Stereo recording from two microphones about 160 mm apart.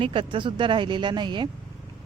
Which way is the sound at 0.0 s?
35° right (ahead or behind).